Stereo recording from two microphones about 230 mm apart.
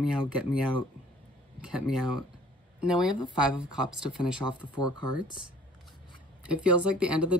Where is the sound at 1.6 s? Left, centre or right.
Centre.